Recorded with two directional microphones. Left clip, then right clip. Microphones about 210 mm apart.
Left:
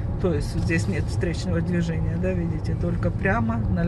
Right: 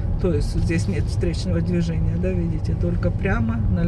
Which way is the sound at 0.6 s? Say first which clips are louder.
Even; 45° left (ahead or behind).